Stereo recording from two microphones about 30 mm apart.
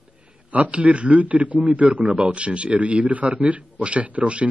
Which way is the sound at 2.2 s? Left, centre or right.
Right.